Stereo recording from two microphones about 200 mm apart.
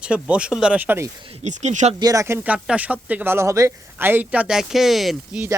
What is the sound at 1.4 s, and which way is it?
Speech, 35° right (ahead or behind).